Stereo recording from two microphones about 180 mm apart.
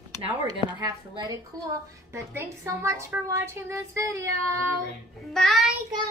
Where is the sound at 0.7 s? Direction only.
25° right (ahead or behind).